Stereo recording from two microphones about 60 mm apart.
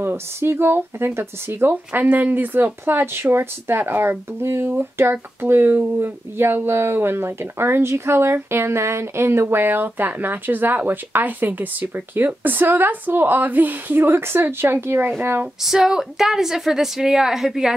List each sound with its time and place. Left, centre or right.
0.0 s speech: right
1.7 s speech: right
15.6 s a woman's voice: centre